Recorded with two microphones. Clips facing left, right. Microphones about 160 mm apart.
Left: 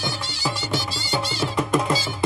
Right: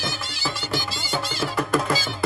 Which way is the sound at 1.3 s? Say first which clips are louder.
Left 1 dB; 10° left (ahead or behind).